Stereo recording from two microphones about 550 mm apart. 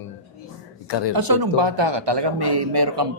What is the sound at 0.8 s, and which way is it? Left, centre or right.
Speech, left.